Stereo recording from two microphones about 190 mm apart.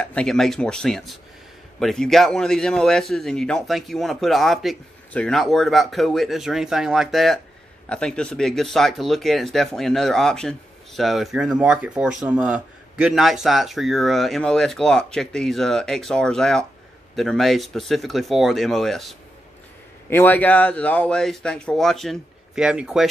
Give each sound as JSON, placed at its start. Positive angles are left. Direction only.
{"t": 0.0, "sound": "speech", "side_deg": 5}